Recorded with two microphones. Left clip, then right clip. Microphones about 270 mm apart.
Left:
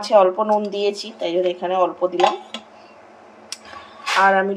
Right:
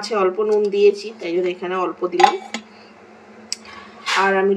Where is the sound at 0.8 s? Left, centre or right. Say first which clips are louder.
Right 7 dB; left.